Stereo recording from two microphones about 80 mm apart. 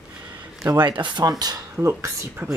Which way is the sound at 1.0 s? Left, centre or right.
Right.